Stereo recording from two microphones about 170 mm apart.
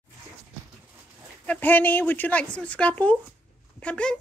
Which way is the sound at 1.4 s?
10° left (ahead or behind).